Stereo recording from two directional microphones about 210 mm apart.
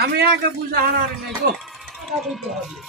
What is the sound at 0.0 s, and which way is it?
Speech, 50° right (ahead or behind).